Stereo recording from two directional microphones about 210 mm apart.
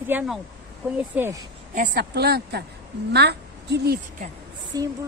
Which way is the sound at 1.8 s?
50° right (ahead or behind).